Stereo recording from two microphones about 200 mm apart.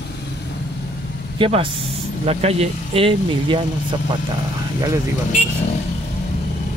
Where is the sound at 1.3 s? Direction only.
25° right (ahead or behind).